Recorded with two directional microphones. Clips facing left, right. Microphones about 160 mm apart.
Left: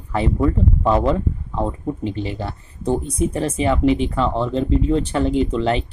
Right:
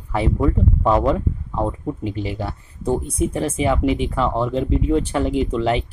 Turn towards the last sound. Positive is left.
turn(degrees=-10)  # may be behind; listen again after turning